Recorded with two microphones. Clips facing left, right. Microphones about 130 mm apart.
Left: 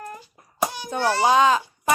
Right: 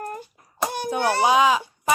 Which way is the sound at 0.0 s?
50° right (ahead or behind).